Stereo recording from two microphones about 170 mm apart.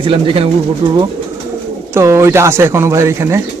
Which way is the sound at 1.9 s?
15° right (ahead or behind).